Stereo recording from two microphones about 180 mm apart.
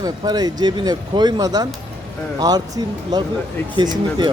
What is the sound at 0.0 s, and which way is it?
Speech, 20° right (ahead or behind).